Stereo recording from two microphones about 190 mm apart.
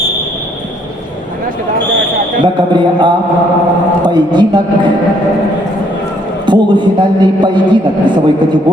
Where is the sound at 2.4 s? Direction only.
25° right (ahead or behind).